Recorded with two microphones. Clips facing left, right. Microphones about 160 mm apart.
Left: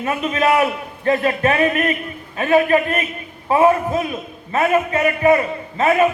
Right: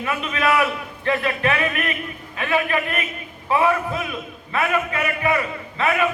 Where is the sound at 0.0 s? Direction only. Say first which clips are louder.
Left 4 dB; 35° left (ahead or behind).